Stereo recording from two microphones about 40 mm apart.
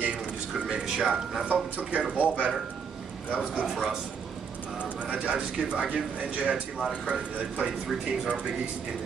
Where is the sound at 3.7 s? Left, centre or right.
Centre.